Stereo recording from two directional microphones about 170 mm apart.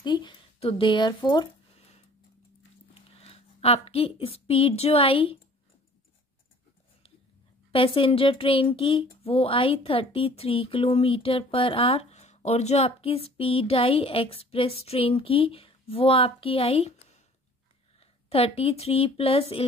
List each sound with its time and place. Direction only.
0.0 s speech: 30° left (ahead or behind)
2.9 s a woman's voice: 35° left (ahead or behind)
7.7 s speech: 30° left (ahead or behind)
18.3 s speech: 35° left (ahead or behind)